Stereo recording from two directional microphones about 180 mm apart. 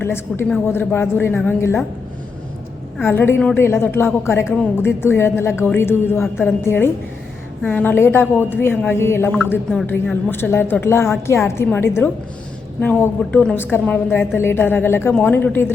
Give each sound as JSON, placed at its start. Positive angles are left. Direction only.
{"t": 0.0, "sound": "a woman's voice", "side_deg": 15}
{"t": 3.1, "sound": "a woman's voice", "side_deg": 10}